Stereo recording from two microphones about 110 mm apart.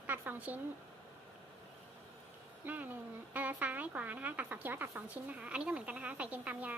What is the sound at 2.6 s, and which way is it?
Speech, 15° right (ahead or behind).